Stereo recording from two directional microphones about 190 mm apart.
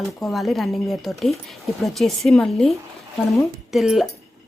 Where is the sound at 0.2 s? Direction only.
Centre (ahead or behind).